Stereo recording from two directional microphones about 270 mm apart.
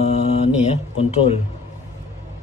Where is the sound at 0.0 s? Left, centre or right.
Left.